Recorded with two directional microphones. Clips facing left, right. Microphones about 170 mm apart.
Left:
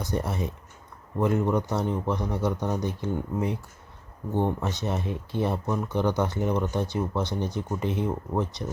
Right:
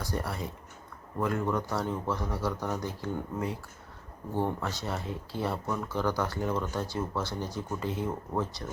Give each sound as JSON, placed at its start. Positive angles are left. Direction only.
{"t": 0.0, "sound": "speech", "side_deg": 20}